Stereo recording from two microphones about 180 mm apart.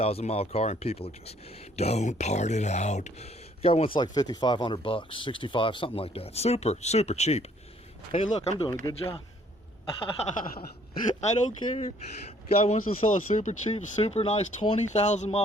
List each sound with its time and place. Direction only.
0.0 s speech: 35° left (ahead or behind)
10.4 s speech: 50° left (ahead or behind)
11.2 s speech: 35° left (ahead or behind)